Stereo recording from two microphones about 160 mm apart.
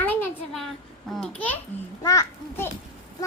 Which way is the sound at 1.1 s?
5° left (ahead or behind).